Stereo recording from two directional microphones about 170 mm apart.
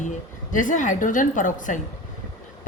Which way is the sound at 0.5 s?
50° left (ahead or behind).